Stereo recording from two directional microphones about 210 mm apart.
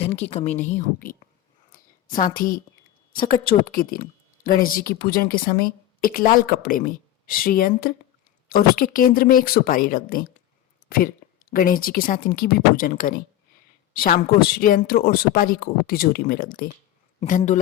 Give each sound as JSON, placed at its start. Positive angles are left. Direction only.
{"t": 0.0, "sound": "a woman's voice", "side_deg": 30}
{"t": 0.5, "sound": "speech", "side_deg": 10}
{"t": 1.7, "sound": "a sound", "side_deg": 40}
{"t": 3.5, "sound": "a woman's voice", "side_deg": 45}